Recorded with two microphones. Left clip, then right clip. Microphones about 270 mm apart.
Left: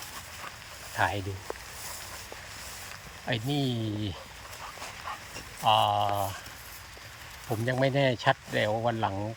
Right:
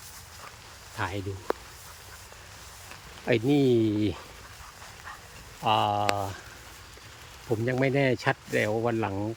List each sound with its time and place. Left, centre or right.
0.9 s speech: centre
3.2 s speech: centre
5.6 s speech: centre
7.5 s speech: centre